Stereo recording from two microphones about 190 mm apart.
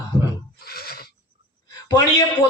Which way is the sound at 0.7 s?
55° left (ahead or behind).